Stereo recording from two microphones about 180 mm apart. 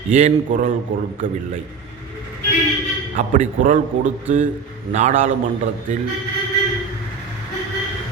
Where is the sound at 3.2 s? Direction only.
45° right (ahead or behind).